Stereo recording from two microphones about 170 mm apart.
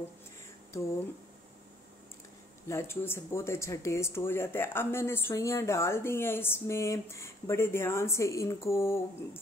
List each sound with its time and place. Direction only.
2.7 s speech: 15° left (ahead or behind)